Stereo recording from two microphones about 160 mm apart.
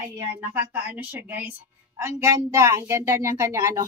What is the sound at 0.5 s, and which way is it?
Speech, 10° right (ahead or behind).